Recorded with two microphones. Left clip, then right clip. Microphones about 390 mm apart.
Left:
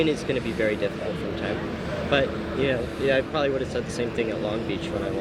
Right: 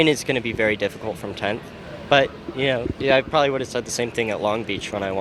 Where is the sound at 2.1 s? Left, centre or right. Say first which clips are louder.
Right 6 dB; right.